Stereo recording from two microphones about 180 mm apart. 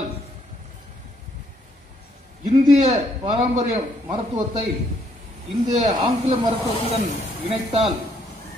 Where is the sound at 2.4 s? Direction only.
35° right (ahead or behind).